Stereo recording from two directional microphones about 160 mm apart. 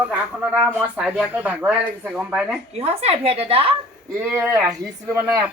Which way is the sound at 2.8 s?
40° right (ahead or behind).